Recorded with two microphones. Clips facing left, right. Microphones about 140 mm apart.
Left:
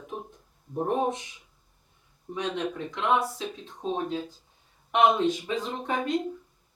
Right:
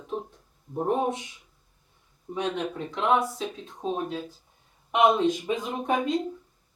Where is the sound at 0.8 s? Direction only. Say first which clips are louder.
Right 1 dB; 5° right (ahead or behind).